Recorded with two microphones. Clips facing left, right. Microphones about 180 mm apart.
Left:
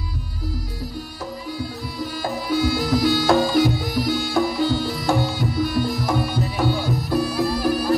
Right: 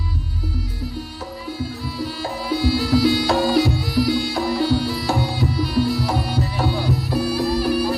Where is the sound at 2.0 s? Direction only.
45° left (ahead or behind).